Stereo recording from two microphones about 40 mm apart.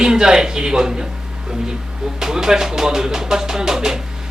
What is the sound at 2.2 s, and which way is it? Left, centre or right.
Music, centre.